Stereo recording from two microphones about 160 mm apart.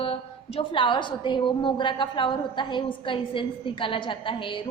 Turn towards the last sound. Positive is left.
turn(degrees=30)  # may be behind; listen again after turning